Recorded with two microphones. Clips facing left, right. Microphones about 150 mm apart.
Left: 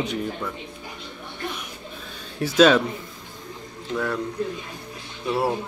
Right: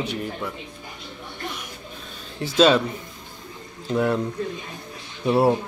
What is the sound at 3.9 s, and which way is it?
Speech, 25° right (ahead or behind).